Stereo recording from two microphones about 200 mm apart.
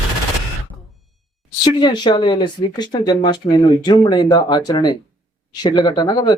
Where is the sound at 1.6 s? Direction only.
20° left (ahead or behind).